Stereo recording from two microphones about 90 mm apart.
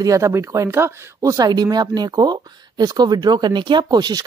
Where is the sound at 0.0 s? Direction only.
35° right (ahead or behind).